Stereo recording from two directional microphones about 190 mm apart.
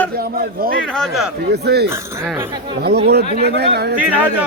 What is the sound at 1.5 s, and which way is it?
Speech, 60° right (ahead or behind).